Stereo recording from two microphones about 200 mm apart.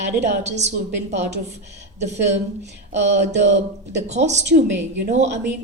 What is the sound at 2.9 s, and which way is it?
Speech, 60° right (ahead or behind).